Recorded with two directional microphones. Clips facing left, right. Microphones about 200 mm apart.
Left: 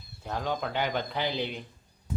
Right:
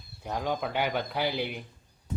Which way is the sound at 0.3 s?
10° right (ahead or behind).